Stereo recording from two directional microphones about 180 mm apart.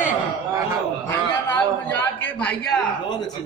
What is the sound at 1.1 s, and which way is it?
A man's voice, 10° left (ahead or behind).